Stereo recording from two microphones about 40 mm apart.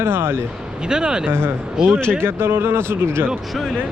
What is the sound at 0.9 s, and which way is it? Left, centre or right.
Speech, centre.